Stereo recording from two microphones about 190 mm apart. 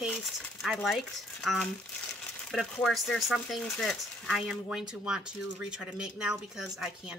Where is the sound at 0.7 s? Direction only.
Centre (ahead or behind).